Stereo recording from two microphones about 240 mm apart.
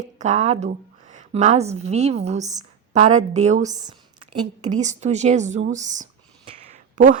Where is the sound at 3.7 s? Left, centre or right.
Centre.